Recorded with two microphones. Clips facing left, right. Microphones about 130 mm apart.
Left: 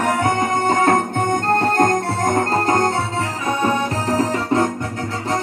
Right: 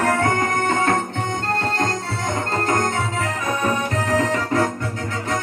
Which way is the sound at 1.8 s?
50° left (ahead or behind).